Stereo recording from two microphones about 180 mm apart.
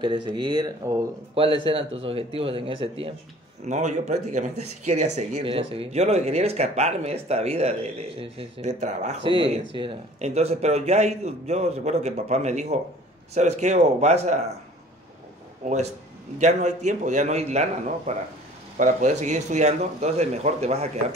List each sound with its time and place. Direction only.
0.0 s speech: 25° right (ahead or behind)
3.6 s speech: 40° right (ahead or behind)
15.6 s speech: 40° right (ahead or behind)